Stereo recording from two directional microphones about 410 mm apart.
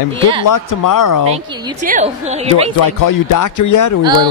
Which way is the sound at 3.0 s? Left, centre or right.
Left.